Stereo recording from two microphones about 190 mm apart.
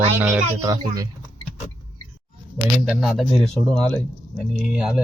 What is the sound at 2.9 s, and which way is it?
A man's voice, centre (ahead or behind).